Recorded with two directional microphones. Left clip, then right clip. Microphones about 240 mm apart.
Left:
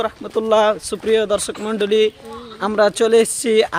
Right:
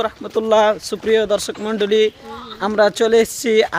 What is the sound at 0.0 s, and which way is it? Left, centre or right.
Speech, centre.